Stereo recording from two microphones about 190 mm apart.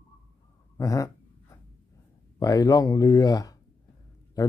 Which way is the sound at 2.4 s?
20° left (ahead or behind).